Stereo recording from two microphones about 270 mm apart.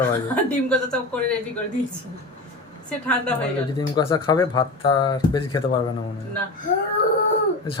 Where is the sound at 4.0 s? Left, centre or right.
Centre.